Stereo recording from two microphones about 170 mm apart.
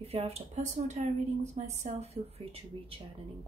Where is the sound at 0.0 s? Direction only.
35° right (ahead or behind).